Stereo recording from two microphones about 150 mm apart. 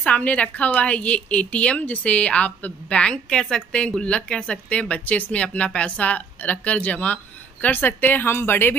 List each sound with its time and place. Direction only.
0.0 s speech: 10° left (ahead or behind)